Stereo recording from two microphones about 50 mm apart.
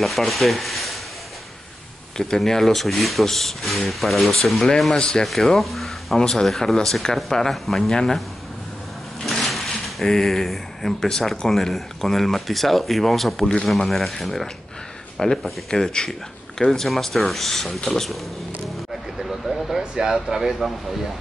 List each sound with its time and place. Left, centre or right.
0.0 s rub: centre
2.1 s speech: centre
4.9 s speech: centre
5.2 s speech: centre
6.1 s speech: centre
9.2 s drawer open or close: centre
10.0 s speech: centre
19.1 s vehicle: centre
19.8 s speech: centre